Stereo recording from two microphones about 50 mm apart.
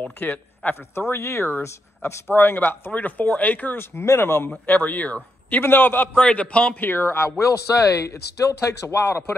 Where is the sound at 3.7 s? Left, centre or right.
Left.